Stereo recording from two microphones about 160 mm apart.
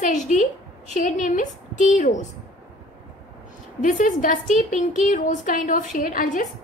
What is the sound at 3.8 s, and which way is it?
A woman's voice, 55° left (ahead or behind).